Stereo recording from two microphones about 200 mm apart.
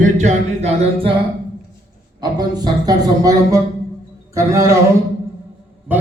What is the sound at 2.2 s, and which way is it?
A man's voice, 20° right (ahead or behind).